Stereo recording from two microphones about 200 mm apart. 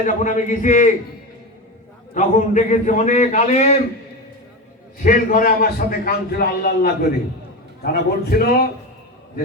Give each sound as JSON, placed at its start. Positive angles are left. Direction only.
{"t": 0.0, "sound": "a man's voice", "side_deg": 40}
{"t": 2.1, "sound": "a man's voice", "side_deg": 40}
{"t": 5.0, "sound": "a man's voice", "side_deg": 40}